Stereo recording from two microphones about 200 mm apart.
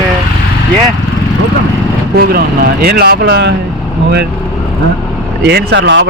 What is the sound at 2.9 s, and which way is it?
Speech, 50° right (ahead or behind).